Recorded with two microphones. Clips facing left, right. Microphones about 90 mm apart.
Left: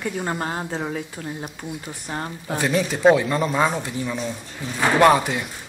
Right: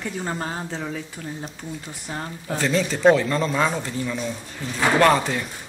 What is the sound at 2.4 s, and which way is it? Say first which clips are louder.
Speech: even; 15° left (ahead or behind).